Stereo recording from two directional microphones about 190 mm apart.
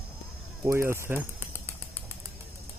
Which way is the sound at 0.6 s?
15° right (ahead or behind).